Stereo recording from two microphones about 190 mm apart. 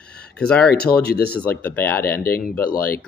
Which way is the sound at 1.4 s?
10° left (ahead or behind).